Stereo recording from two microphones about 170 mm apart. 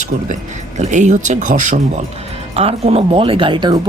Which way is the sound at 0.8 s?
45° right (ahead or behind).